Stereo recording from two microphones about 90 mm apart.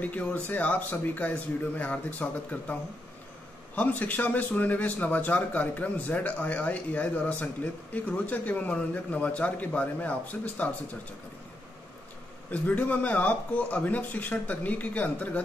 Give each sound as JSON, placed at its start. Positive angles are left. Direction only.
{"t": 0.0, "sound": "speech", "side_deg": 15}
{"t": 3.7, "sound": "speech", "side_deg": 15}
{"t": 12.4, "sound": "speech", "side_deg": 15}